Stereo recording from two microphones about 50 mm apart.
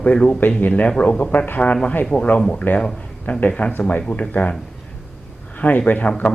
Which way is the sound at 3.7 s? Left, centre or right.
Left.